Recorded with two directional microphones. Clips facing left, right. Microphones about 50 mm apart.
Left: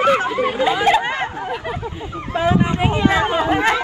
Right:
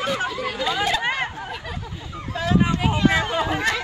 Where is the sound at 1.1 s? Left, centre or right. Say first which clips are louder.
Left 3 dB; left.